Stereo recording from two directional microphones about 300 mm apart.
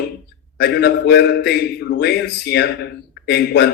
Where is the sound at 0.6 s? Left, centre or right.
Left.